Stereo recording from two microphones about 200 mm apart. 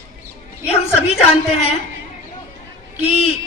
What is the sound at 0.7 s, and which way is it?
A man's voice, 30° left (ahead or behind).